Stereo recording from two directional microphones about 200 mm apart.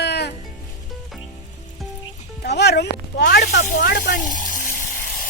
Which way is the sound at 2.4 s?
55° left (ahead or behind).